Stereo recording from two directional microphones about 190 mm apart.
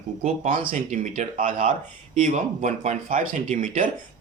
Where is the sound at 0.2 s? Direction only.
40° right (ahead or behind).